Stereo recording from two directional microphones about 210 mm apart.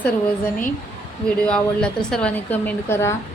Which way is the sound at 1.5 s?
5° left (ahead or behind).